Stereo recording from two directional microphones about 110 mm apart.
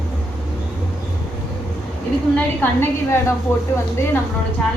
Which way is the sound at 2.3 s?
20° left (ahead or behind).